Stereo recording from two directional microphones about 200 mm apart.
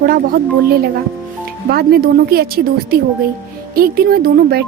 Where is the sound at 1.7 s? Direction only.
50° right (ahead or behind).